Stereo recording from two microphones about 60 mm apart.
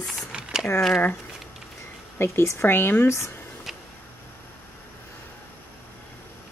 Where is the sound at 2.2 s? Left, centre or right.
Left.